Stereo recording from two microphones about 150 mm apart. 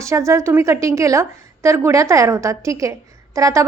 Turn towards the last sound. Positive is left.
turn(degrees=-20)  # may be behind; listen again after turning